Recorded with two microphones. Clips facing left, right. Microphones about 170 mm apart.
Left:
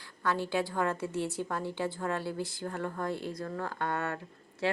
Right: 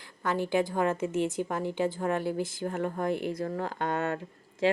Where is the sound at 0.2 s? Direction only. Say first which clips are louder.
Right 3 dB; 15° right (ahead or behind).